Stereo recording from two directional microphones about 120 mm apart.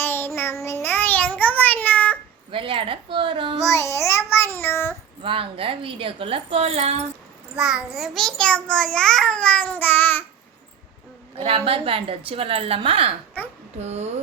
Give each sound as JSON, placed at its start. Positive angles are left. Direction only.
{"t": 0.0, "sound": "child singing", "side_deg": 20}
{"t": 2.5, "sound": "a woman's voice", "side_deg": -45}
{"t": 3.6, "sound": "a child's voice", "side_deg": 25}
{"t": 5.2, "sound": "a woman's voice", "side_deg": -50}
{"t": 7.5, "sound": "a child's voice", "side_deg": -5}
{"t": 11.3, "sound": "a woman's voice", "side_deg": -55}
{"t": 13.7, "sound": "speech", "side_deg": -65}